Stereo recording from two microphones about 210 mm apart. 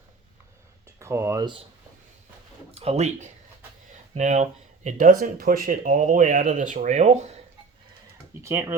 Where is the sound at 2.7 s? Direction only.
30° right (ahead or behind).